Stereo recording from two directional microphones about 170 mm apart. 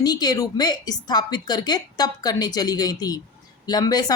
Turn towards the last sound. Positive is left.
turn(degrees=25)  # may be behind; listen again after turning